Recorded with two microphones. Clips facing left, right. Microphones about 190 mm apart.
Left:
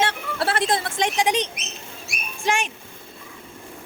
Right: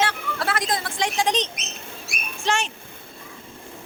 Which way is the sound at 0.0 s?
30° left (ahead or behind).